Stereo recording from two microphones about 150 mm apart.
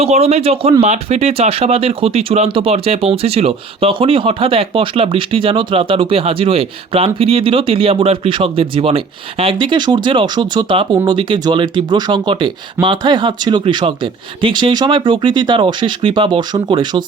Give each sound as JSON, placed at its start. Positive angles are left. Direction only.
{"t": 0.0, "sound": "speech", "side_deg": -45}